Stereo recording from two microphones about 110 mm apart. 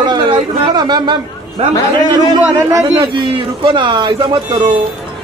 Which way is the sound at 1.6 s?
75° right (ahead or behind).